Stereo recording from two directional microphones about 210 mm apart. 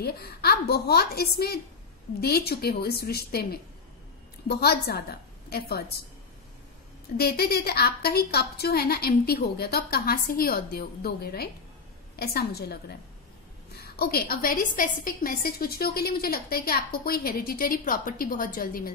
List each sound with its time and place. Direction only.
0.0 s a woman's voice: 50° left (ahead or behind)
4.5 s a woman's voice: 50° left (ahead or behind)
7.2 s a woman's voice: 50° left (ahead or behind)
13.7 s a woman's voice: 50° left (ahead or behind)